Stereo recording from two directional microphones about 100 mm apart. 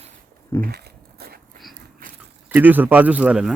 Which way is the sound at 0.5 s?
20° left (ahead or behind).